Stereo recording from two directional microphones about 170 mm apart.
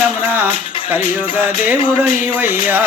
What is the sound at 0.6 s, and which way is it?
Music, 35° left (ahead or behind).